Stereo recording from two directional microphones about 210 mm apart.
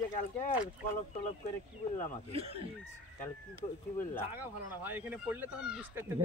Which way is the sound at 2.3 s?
25° right (ahead or behind).